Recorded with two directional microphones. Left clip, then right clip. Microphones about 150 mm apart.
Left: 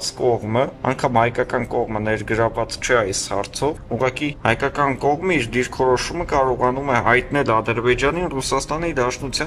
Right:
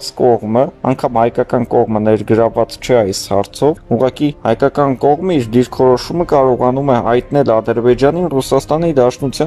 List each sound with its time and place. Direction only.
0.2 s speech: 30° right (ahead or behind)